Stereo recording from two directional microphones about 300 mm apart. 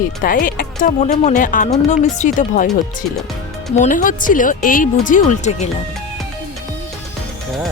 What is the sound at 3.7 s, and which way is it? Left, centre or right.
Speech, left.